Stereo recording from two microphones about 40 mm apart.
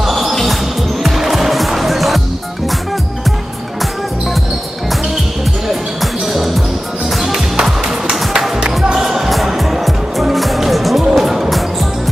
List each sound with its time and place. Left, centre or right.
0.0 s music: centre
5.9 s music: centre
8.4 s music: centre